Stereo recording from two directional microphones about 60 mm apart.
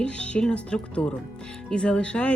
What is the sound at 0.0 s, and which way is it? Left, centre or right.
Speech, centre.